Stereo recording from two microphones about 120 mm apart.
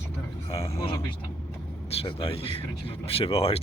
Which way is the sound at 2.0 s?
50° left (ahead or behind).